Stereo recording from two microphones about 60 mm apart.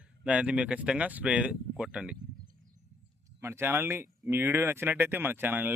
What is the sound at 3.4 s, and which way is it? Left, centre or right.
Speech, right.